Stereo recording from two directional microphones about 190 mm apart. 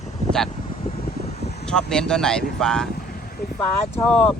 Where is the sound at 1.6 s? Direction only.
5° left (ahead or behind).